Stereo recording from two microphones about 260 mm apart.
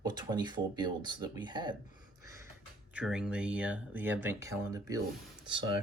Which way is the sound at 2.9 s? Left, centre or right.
Centre.